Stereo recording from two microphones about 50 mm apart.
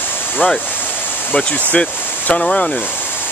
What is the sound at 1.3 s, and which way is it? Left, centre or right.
Speech, left.